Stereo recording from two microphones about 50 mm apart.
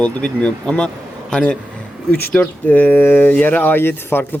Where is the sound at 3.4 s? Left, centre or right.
Left.